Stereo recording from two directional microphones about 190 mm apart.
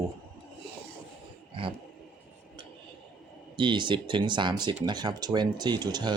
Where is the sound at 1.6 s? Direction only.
25° right (ahead or behind).